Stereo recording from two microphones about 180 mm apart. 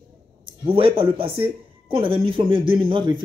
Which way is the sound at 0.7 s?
30° right (ahead or behind).